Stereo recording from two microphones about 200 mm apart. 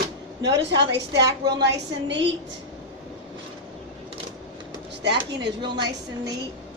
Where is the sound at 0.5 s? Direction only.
60° right (ahead or behind).